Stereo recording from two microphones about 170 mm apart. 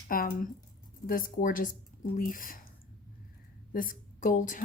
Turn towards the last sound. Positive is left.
turn(degrees=50)  # may be behind; listen again after turning